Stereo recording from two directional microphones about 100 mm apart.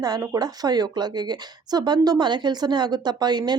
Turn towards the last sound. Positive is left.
turn(degrees=-45)  # may be behind; listen again after turning